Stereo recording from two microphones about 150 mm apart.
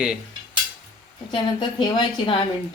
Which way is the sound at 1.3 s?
30° left (ahead or behind).